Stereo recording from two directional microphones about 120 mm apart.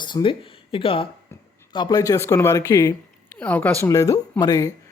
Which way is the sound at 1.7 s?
35° left (ahead or behind).